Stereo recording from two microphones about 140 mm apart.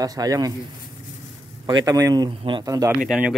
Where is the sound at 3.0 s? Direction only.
5° right (ahead or behind).